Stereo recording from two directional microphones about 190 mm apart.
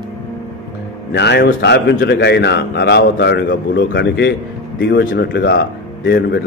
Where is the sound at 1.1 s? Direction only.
60° left (ahead or behind).